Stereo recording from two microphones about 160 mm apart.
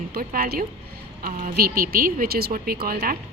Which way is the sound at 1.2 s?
60° right (ahead or behind).